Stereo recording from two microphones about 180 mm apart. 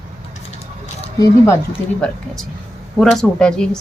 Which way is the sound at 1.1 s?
15° left (ahead or behind).